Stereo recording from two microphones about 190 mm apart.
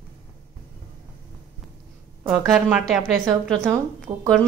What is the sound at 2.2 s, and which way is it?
Speech, centre (ahead or behind).